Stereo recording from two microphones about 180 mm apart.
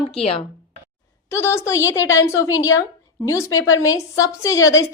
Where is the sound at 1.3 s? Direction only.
15° left (ahead or behind).